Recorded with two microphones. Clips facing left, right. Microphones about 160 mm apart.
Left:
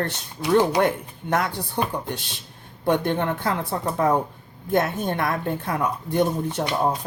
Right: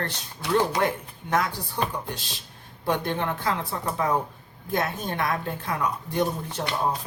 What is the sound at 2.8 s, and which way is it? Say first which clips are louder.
A woman's voice: left 5 dB; 55° left (ahead or behind).